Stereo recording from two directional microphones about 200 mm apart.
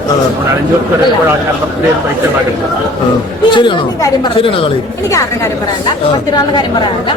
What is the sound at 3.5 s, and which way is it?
Speech, 25° left (ahead or behind).